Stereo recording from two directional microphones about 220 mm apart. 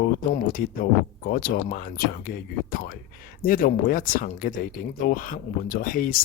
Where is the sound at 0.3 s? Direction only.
40° left (ahead or behind).